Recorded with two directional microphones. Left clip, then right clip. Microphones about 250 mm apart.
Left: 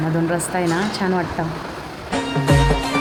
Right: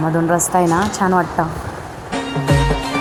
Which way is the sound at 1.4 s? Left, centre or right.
Centre.